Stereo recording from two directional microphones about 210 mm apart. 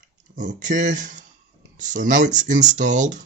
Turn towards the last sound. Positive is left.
turn(degrees=-35)  # may be behind; listen again after turning